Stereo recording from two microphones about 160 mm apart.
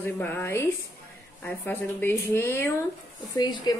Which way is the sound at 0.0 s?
10° left (ahead or behind).